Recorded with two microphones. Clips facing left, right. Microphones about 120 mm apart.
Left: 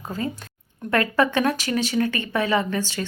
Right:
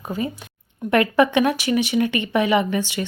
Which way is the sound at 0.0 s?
15° right (ahead or behind).